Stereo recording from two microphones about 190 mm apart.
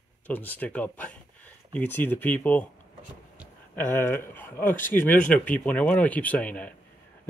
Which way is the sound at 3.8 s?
10° left (ahead or behind).